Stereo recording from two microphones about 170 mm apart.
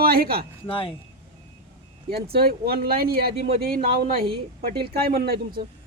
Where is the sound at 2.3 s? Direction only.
65° right (ahead or behind).